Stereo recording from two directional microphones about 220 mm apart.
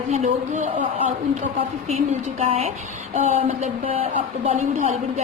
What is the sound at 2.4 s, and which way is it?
A woman's voice, 25° right (ahead or behind).